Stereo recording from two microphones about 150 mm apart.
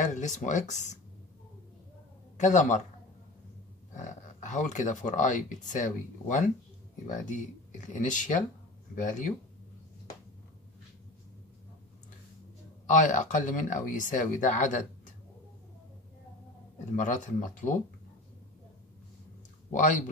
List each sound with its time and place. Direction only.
0.0 s speech: 55° left (ahead or behind)
2.3 s speech: 55° left (ahead or behind)
3.9 s speech: 55° left (ahead or behind)
13.0 s speech: 55° left (ahead or behind)
16.9 s speech: 55° left (ahead or behind)
19.7 s speech: 55° left (ahead or behind)